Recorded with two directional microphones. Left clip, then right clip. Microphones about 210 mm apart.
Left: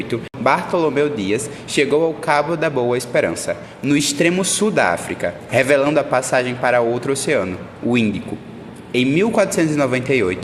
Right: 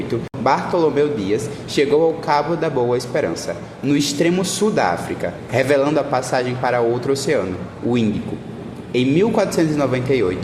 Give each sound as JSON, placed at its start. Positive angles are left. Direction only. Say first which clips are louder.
{"t": 0.1, "sound": "speech", "louder": "left 1 dB", "side_deg": 25}
{"t": 8.9, "sound": "speech", "louder": "even", "side_deg": 20}